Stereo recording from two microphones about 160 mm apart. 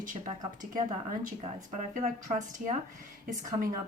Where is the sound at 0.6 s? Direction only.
55° right (ahead or behind).